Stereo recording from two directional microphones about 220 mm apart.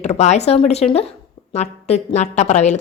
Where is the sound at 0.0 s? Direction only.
30° left (ahead or behind).